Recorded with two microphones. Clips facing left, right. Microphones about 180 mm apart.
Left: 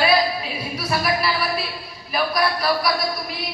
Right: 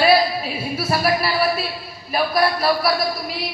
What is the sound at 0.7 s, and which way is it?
Speech, 30° right (ahead or behind).